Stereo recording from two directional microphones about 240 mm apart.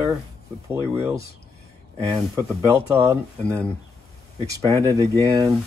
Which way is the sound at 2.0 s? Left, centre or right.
Centre.